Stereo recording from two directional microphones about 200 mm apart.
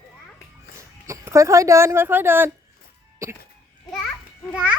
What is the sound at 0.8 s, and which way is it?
Speech, 15° right (ahead or behind).